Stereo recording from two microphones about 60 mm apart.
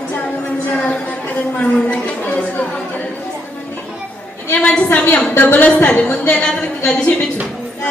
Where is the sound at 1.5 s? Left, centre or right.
Left.